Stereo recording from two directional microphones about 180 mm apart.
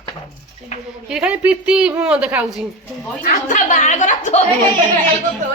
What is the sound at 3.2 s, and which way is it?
A woman's voice, 45° left (ahead or behind).